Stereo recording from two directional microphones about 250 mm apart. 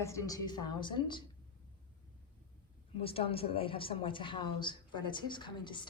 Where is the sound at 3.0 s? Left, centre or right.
Left.